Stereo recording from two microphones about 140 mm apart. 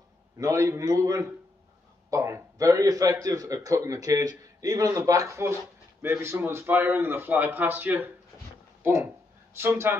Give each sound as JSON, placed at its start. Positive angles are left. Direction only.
{"t": 0.4, "sound": "a man's voice", "side_deg": -20}